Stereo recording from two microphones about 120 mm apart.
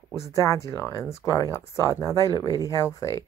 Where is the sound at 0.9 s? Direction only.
30° left (ahead or behind).